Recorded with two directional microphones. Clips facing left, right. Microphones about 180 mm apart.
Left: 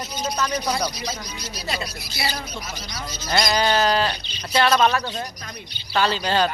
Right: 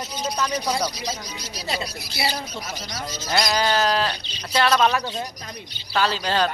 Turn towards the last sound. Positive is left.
turn(degrees=0)  # may be behind; listen again after turning